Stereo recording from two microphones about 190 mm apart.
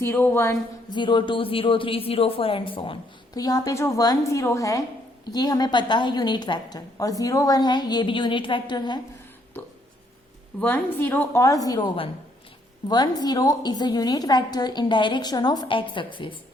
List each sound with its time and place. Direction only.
0.0 s speech: 15° left (ahead or behind)
10.6 s a woman's voice: 10° left (ahead or behind); by 16.4 s 25° left (ahead or behind)